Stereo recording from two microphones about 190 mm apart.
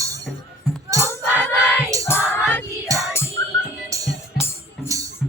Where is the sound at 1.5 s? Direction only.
15° right (ahead or behind).